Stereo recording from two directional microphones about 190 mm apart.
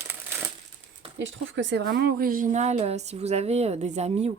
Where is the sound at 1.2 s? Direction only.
70° right (ahead or behind).